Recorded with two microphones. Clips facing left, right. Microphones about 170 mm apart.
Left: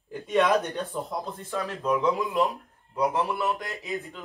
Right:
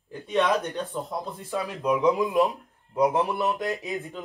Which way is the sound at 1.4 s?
15° right (ahead or behind).